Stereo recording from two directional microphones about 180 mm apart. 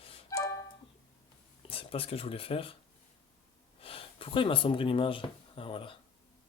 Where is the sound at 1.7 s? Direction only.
30° left (ahead or behind).